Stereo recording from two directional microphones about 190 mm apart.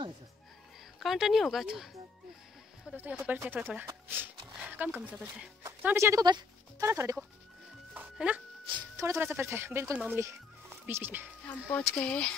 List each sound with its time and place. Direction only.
0.9 s speech: centre (ahead or behind)
2.9 s speech: 5° right (ahead or behind)
7.9 s music: 5° right (ahead or behind)
8.6 s speech: 20° right (ahead or behind)
11.4 s speech: 5° left (ahead or behind)